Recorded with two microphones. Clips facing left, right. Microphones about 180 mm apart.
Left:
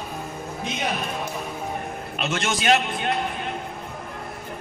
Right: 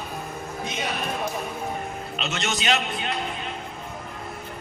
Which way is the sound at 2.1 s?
55° left (ahead or behind).